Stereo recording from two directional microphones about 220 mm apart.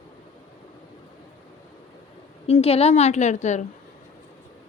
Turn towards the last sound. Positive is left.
turn(degrees=30)  # may be behind; listen again after turning